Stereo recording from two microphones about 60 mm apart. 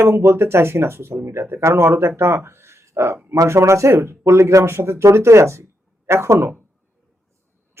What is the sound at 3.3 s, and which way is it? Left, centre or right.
Speech, right.